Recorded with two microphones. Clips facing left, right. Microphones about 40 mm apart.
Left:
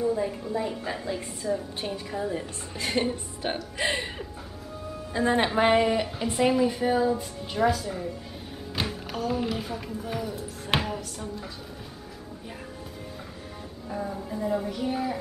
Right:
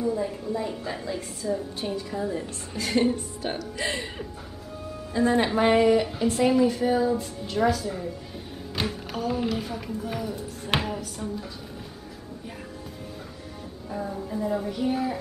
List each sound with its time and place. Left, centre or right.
0.0 s speech: centre
5.1 s speech: left
5.5 s speech: centre
13.8 s music: centre